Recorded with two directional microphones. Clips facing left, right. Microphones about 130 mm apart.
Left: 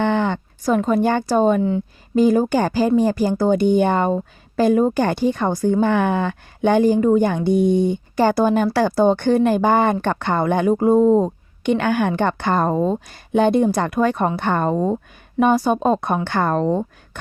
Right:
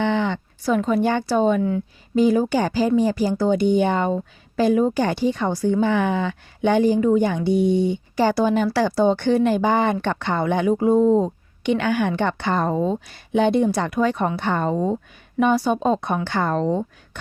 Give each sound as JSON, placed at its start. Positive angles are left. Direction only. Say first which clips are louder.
{"t": 0.0, "sound": "speech", "louder": "left 2 dB", "side_deg": 50}